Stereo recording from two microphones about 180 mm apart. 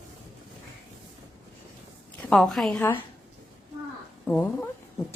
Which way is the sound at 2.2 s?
Centre (ahead or behind).